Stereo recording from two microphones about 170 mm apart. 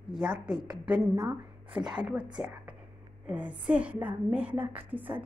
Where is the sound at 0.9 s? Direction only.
20° right (ahead or behind).